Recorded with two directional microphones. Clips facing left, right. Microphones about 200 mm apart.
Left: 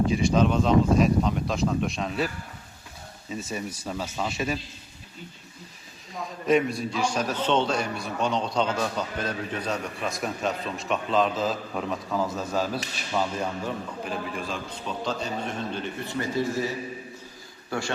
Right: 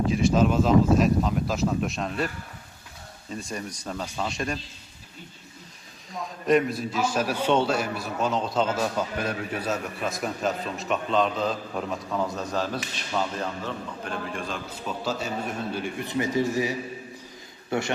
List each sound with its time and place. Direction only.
0.1 s a man's voice: centre (ahead or behind)
3.3 s a man's voice: 5° left (ahead or behind)
6.4 s a man's voice: centre (ahead or behind); by 17.9 s 20° right (ahead or behind)